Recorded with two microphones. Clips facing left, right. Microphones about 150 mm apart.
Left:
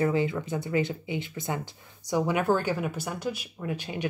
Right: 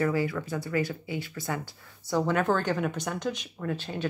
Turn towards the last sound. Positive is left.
turn(degrees=15)  # may be behind; listen again after turning